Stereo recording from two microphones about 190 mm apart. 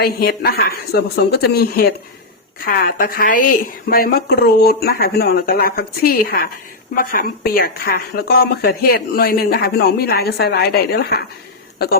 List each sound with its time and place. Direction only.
0.0 s a woman's voice: 55° left (ahead or behind)